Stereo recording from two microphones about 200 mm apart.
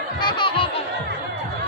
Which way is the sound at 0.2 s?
20° left (ahead or behind).